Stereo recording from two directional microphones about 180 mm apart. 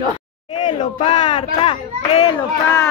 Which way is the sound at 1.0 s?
25° left (ahead or behind).